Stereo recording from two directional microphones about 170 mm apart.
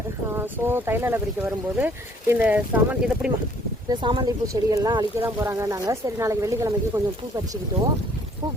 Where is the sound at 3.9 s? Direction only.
25° right (ahead or behind).